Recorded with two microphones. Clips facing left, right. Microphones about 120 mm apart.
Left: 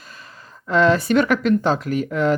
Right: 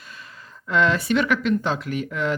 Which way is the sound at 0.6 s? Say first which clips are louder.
Left 4 dB; 35° left (ahead or behind).